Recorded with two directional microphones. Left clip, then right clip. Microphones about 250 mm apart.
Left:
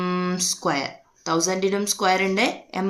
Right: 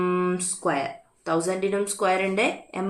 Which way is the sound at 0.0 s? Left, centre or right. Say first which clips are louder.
Even; left.